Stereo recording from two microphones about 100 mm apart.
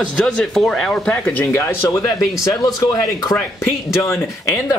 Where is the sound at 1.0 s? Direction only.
15° left (ahead or behind).